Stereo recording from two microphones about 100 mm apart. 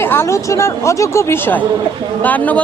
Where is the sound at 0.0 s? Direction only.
25° left (ahead or behind).